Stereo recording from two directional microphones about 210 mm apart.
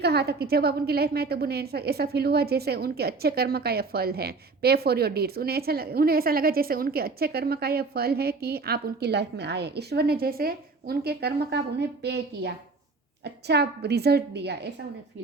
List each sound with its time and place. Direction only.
0.0 s a woman's voice: 50° right (ahead or behind)